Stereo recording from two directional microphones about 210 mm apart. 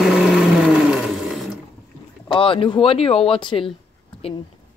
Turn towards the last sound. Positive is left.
turn(degrees=25)  # may be behind; listen again after turning